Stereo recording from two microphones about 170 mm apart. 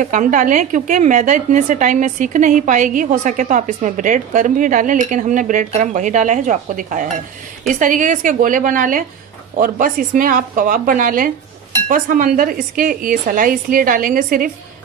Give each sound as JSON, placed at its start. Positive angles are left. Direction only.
{"t": 0.0, "sound": "a woman's voice", "side_deg": -50}